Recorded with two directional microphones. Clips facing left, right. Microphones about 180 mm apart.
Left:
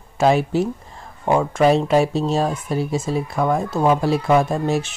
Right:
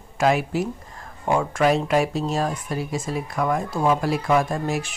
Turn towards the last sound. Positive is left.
turn(degrees=25)  # may be behind; listen again after turning